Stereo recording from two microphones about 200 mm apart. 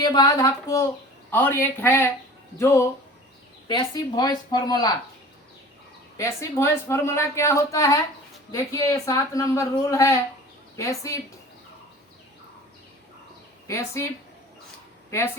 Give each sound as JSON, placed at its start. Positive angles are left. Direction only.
{"t": 0.0, "sound": "a woman's voice", "side_deg": 20}
{"t": 6.1, "sound": "speech", "side_deg": 15}
{"t": 13.7, "sound": "speech", "side_deg": 15}
{"t": 15.1, "sound": "speech", "side_deg": 15}